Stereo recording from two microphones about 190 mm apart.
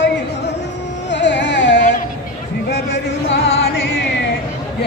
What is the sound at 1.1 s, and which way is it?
Carnatic music, 65° left (ahead or behind).